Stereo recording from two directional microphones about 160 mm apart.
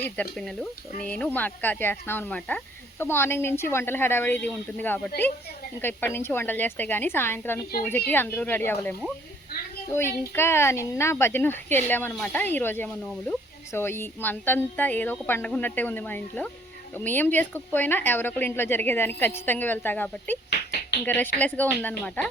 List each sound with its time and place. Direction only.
0.3 s speech: centre (ahead or behind)
20.5 s a sound: 90° left
21.0 s speech: 10° left (ahead or behind)